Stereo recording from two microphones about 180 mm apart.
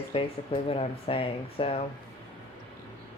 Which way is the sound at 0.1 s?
30° left (ahead or behind).